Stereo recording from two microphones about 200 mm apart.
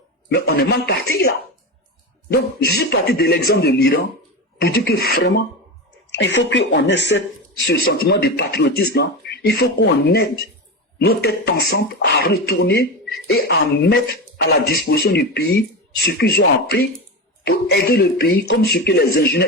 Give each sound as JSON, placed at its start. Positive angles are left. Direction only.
{"t": 0.3, "sound": "speech", "side_deg": 50}
{"t": 2.3, "sound": "speech", "side_deg": 55}
{"t": 6.1, "sound": "speech", "side_deg": 65}